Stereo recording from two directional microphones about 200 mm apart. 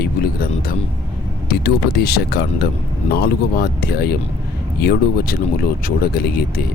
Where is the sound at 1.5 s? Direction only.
50° left (ahead or behind).